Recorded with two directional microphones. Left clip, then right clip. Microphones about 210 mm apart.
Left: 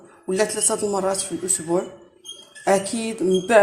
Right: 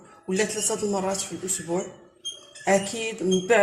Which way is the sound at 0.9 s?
20° left (ahead or behind).